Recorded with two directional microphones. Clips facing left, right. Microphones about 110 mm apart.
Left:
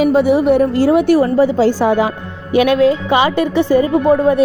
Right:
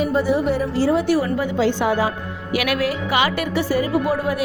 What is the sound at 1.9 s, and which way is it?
A woman's voice, 20° left (ahead or behind).